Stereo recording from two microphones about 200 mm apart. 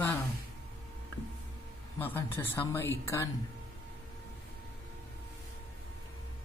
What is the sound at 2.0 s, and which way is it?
Speech, 10° left (ahead or behind).